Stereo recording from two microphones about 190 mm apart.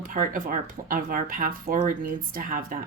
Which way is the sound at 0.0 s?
45° right (ahead or behind).